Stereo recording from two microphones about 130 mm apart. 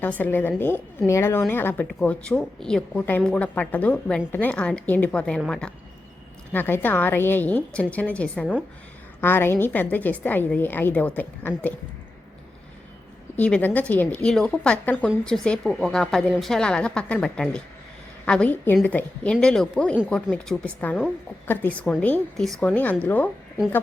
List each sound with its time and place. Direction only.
0.0 s a woman's voice: 15° left (ahead or behind)
6.5 s a woman's voice: 15° left (ahead or behind)
13.3 s a woman's voice: 10° left (ahead or behind)